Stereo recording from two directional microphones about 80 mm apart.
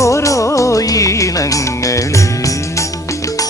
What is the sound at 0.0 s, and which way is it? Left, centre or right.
Music, left.